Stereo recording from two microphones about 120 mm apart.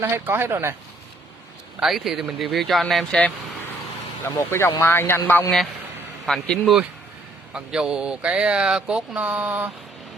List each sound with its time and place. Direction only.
0.0 s speech: 20° right (ahead or behind)
1.8 s speech: centre (ahead or behind)
4.3 s speech: 25° left (ahead or behind)
6.2 s speech: centre (ahead or behind)